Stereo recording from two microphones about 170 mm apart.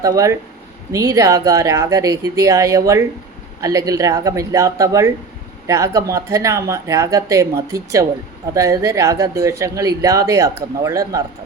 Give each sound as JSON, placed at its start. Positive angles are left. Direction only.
{"t": 0.0, "sound": "speech", "side_deg": -20}